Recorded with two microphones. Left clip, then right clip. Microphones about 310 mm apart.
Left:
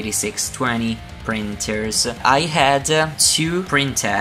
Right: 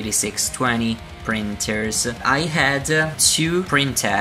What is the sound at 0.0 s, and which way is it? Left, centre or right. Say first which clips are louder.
Speech: even; centre.